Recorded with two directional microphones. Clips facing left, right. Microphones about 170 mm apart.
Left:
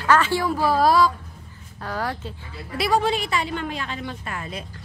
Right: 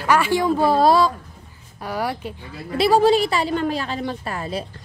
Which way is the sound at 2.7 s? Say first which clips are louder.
Right 6 dB; 30° right (ahead or behind).